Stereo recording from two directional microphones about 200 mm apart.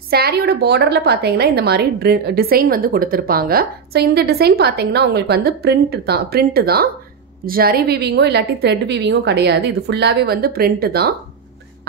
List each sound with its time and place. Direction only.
0.1 s a woman's voice: 55° right (ahead or behind)